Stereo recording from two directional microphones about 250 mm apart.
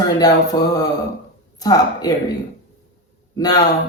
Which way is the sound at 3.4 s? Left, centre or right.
Centre.